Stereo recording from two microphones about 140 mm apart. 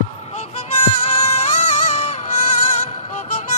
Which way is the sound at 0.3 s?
55° left (ahead or behind).